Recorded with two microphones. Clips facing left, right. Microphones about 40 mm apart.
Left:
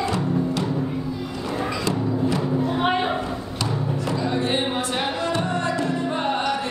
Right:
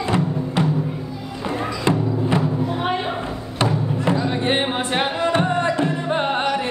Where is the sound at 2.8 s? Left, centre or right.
Centre.